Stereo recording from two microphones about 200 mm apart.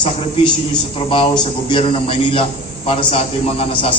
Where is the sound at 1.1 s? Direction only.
25° left (ahead or behind).